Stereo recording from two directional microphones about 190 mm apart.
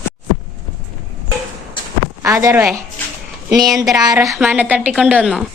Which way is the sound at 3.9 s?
20° right (ahead or behind).